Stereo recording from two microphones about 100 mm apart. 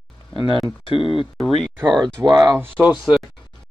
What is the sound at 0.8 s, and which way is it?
Speech, 60° left (ahead or behind).